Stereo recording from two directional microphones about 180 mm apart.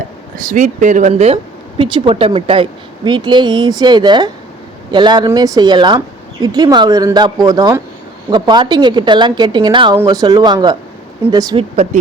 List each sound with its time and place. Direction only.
0.3 s a woman's voice: 45° right (ahead or behind); by 11.6 s 20° right (ahead or behind)